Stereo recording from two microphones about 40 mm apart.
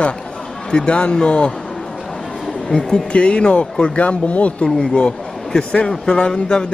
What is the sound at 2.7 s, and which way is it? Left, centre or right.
Speech, left.